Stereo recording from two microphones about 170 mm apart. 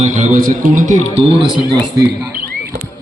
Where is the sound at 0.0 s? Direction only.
45° right (ahead or behind).